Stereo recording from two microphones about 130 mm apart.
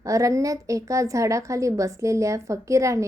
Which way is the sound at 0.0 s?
25° right (ahead or behind).